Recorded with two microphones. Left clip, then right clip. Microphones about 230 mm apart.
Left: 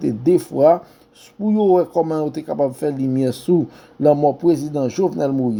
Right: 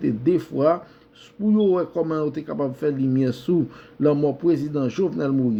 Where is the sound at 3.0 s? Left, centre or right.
Centre.